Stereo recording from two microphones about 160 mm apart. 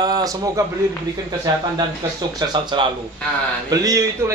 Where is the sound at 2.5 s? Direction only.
30° right (ahead or behind).